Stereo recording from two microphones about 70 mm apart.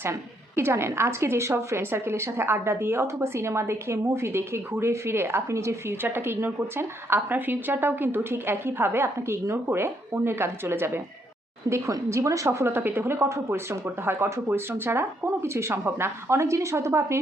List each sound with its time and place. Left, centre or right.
0.0 s a woman's voice: right